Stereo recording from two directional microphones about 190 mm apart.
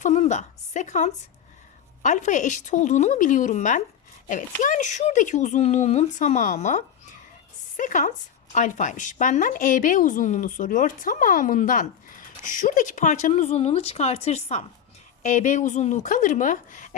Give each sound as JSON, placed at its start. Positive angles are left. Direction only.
{"t": 0.0, "sound": "a woman's voice", "side_deg": 40}